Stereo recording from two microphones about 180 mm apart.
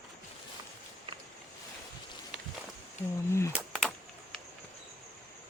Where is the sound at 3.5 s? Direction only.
Centre (ahead or behind).